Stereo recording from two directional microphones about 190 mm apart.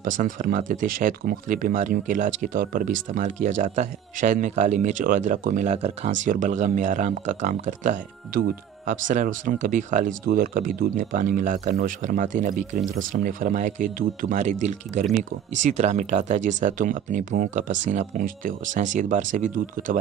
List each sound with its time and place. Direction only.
0.2 s speech: 45° right (ahead or behind)